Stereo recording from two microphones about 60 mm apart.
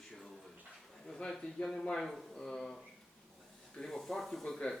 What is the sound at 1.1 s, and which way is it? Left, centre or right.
Speech, centre.